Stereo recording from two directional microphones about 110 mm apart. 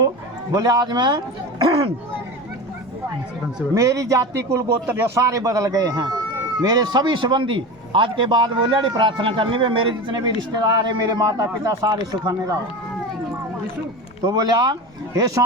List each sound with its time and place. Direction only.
0.5 s a man's voice: 35° right (ahead or behind)
3.8 s a man's voice: 30° right (ahead or behind); by 10.2 s 50° right (ahead or behind)
10.2 s a man's voice: 35° right (ahead or behind)
14.3 s a man's voice: 35° right (ahead or behind)